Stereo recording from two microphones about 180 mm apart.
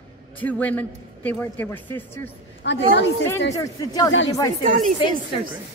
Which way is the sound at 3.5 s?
20° left (ahead or behind).